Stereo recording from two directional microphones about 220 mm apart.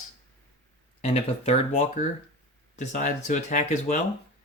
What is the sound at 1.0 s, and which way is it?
Speech, 30° left (ahead or behind).